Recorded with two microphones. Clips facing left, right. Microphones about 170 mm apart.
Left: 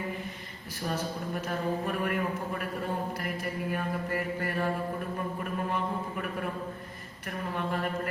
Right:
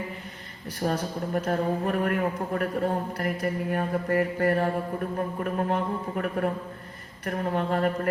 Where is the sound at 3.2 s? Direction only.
50° right (ahead or behind).